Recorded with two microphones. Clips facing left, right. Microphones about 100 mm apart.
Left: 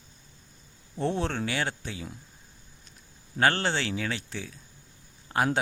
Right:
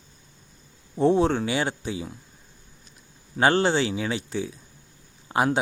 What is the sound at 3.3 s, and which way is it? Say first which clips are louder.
Speech: right 5 dB; 15° right (ahead or behind).